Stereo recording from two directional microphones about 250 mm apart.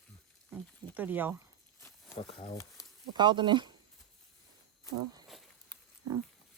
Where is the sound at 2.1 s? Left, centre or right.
Left.